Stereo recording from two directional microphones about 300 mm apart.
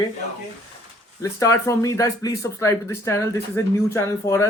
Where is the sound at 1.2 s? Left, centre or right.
Centre.